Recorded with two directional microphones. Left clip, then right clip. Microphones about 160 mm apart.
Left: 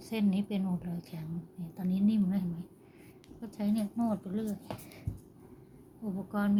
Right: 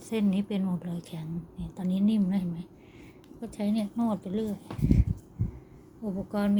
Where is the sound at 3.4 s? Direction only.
15° right (ahead or behind).